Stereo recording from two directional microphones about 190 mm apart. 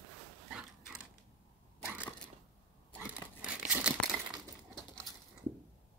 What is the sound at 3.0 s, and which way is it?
Crumpling, 5° right (ahead or behind).